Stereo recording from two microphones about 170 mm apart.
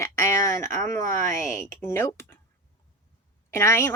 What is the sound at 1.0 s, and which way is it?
Speech, 45° right (ahead or behind).